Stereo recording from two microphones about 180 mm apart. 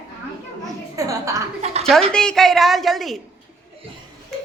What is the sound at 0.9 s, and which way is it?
Speech, 15° right (ahead or behind).